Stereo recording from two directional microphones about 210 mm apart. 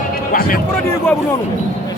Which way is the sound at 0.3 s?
45° left (ahead or behind).